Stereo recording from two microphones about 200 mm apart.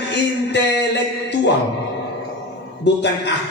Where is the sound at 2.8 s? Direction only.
60° left (ahead or behind).